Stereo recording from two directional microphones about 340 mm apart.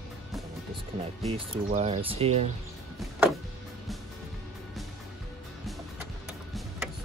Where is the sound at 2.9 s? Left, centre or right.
Centre.